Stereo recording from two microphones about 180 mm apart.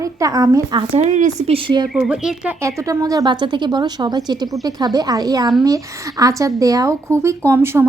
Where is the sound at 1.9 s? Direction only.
5° right (ahead or behind).